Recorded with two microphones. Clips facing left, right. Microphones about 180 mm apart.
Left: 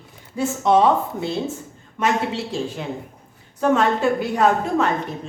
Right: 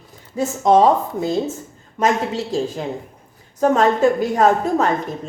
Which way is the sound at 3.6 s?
40° right (ahead or behind).